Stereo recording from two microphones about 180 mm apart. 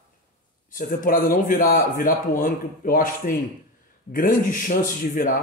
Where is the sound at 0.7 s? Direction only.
50° left (ahead or behind).